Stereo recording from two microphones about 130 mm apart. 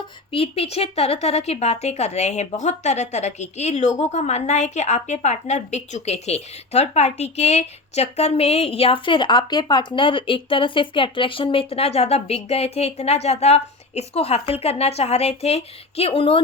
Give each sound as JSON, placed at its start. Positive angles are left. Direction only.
{"t": 0.3, "sound": "a woman's voice", "side_deg": 50}